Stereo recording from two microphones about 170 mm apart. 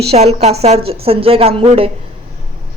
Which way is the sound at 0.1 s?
40° right (ahead or behind).